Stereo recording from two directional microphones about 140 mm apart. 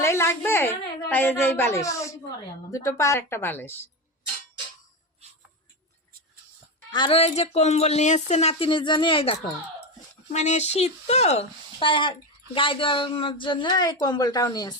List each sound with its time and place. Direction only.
0.0 s a woman's voice: 20° left (ahead or behind)
6.9 s speech: 40° left (ahead or behind)
10.3 s speech: 55° left (ahead or behind)
11.8 s speech: 35° left (ahead or behind)